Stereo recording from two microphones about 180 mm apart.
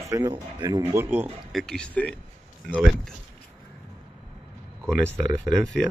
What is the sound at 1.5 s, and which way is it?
Speech, centre (ahead or behind).